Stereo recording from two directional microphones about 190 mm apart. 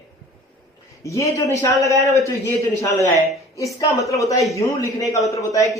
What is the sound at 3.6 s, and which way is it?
Speech, 15° left (ahead or behind).